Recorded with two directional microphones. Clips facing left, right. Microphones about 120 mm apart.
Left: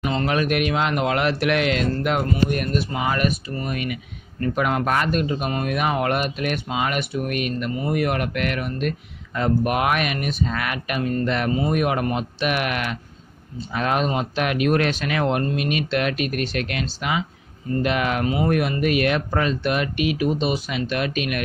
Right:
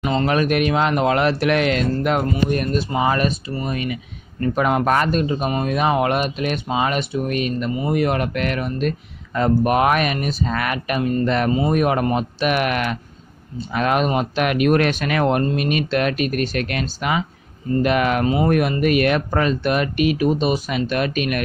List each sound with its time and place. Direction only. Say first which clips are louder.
0.0 s speech: right 3 dB; 25° right (ahead or behind)
0.3 s speech: right 3 dB; 40° right (ahead or behind)
4.8 s speech: right 3 dB; 40° right (ahead or behind)
5.2 s speech: right 3 dB; 30° right (ahead or behind)
11.0 s speech: right 3 dB; 25° right (ahead or behind)
11.2 s speech: right 3 dB; 40° right (ahead or behind)
13.7 s speech: right 3 dB; 70° right (ahead or behind); by 18.2 s 50° right (ahead or behind)
18.2 s speech: right 3 dB; 30° right (ahead or behind)
18.5 s speech: right 3 dB; 50° right (ahead or behind)